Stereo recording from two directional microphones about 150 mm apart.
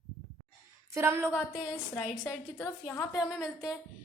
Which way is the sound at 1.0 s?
15° right (ahead or behind).